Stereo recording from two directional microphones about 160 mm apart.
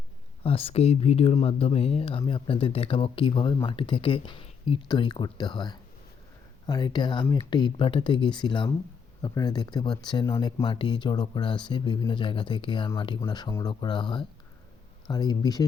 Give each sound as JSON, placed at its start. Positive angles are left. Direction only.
{"t": 0.4, "sound": "speech", "side_deg": 35}